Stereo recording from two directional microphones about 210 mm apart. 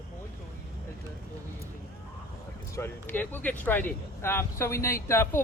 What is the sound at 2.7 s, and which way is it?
Speech, 10° left (ahead or behind).